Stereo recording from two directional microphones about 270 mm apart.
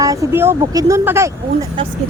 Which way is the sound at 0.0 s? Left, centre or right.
Centre.